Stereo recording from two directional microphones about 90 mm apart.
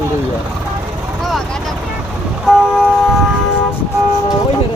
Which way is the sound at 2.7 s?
Centre (ahead or behind).